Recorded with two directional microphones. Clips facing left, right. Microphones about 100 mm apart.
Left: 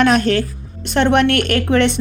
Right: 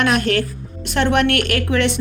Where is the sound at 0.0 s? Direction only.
30° left (ahead or behind).